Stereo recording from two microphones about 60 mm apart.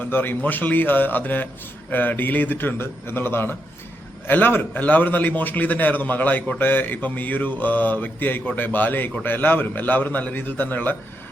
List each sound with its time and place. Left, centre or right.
0.0 s mantra: left